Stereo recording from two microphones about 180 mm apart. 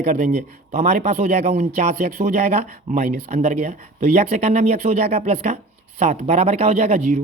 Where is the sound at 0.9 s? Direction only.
40° right (ahead or behind).